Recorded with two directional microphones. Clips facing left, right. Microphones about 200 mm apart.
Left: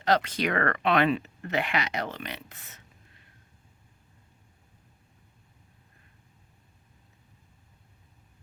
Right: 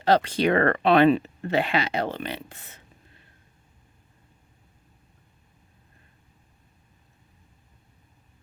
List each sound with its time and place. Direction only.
0.0 s speech: 30° right (ahead or behind)